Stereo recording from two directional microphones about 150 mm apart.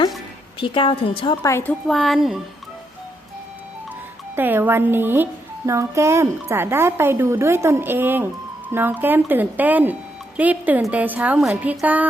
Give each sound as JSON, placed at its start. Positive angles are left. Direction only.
{"t": 0.6, "sound": "a woman's voice", "side_deg": 35}
{"t": 1.4, "sound": "a woman's voice", "side_deg": 20}
{"t": 1.9, "sound": "speech", "side_deg": 0}
{"t": 4.4, "sound": "speech", "side_deg": -15}